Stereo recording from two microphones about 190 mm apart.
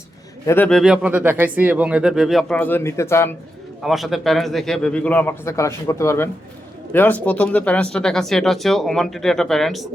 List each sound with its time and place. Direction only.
0.4 s speech: 10° left (ahead or behind)
3.8 s speech: centre (ahead or behind)